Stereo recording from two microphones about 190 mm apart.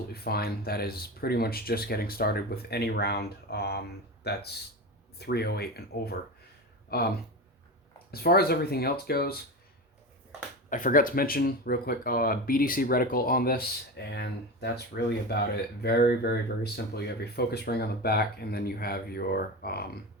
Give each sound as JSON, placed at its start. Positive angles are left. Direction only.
{"t": 0.1, "sound": "speech", "side_deg": 55}
{"t": 8.1, "sound": "speech", "side_deg": 55}
{"t": 10.7, "sound": "speech", "side_deg": 45}